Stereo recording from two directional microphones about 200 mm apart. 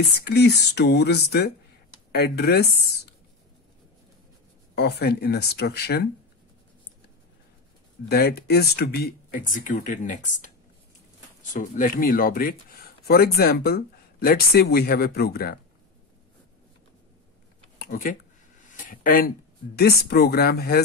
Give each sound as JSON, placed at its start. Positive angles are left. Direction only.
{"t": 0.2, "sound": "speech", "side_deg": 55}
{"t": 4.7, "sound": "speech", "side_deg": 55}
{"t": 8.1, "sound": "speech", "side_deg": 55}
{"t": 11.5, "sound": "speech", "side_deg": 40}
{"t": 17.7, "sound": "a sound", "side_deg": 45}
{"t": 18.7, "sound": "speech", "side_deg": 40}